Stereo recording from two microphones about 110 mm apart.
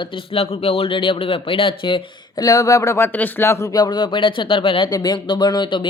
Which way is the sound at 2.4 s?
35° left (ahead or behind).